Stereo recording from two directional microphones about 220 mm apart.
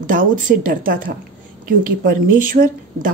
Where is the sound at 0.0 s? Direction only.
40° right (ahead or behind).